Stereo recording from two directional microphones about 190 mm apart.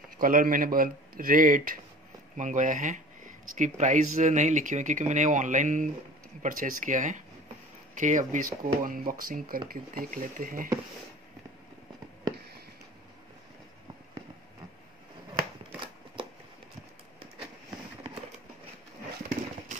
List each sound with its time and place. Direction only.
0.2 s speech: 45° right (ahead or behind)